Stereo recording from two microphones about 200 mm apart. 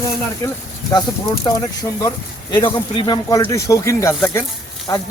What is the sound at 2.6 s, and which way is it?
Speech, 25° left (ahead or behind).